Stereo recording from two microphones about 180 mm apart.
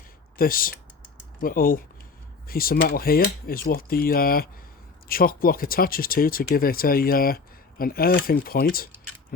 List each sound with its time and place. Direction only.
0.3 s speech: 50° left (ahead or behind)